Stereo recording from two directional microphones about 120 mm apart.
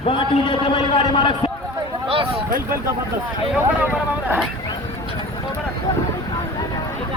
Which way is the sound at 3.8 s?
15° right (ahead or behind).